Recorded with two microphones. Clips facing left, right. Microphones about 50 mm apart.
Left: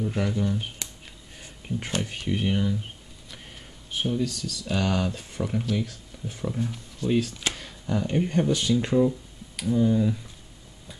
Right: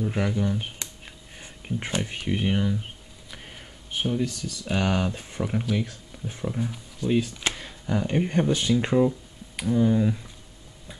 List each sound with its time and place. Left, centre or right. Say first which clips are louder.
0.0 s a sound: right 1 dB; centre
2.0 s speech: right 1 dB; centre
4.2 s speech: even; right
6.4 s speech: even; centre
7.2 s speech: right 1 dB; centre